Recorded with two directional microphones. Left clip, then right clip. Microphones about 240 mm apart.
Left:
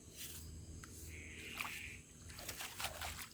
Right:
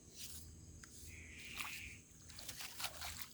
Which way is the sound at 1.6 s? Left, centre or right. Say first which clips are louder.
Left 3 dB; right.